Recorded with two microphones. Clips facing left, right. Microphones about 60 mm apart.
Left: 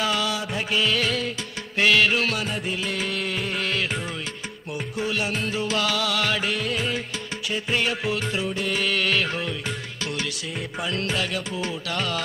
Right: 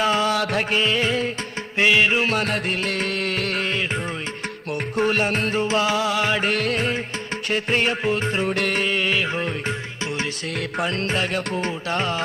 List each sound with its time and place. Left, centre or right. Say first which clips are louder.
0.0 s music: right 4 dB; right
0.3 s music: right 6 dB; right
0.7 s music: right 2 dB; right
2.3 s music: right 5 dB; right
3.6 s music: right 2 dB; right
4.9 s music: right 6 dB; right
5.7 s music: right 2 dB; right
6.4 s music: right 4 dB; right
7.7 s music: right 3 dB; right
8.5 s music: right 4 dB; right
8.8 s music: right 1 dB; centre
10.8 s music: right 3 dB; right